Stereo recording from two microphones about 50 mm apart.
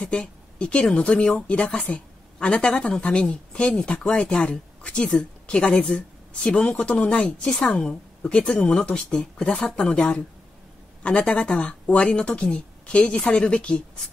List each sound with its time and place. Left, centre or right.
0.0 s a woman's voice: centre